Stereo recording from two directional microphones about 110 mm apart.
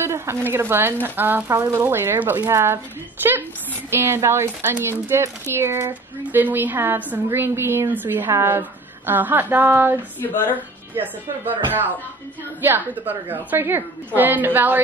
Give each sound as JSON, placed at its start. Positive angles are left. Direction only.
{"t": 0.0, "sound": "a sound", "side_deg": -25}
{"t": 0.5, "sound": "a woman's voice", "side_deg": -20}
{"t": 10.2, "sound": "speech", "side_deg": 20}
{"t": 11.0, "sound": "a woman's voice", "side_deg": -15}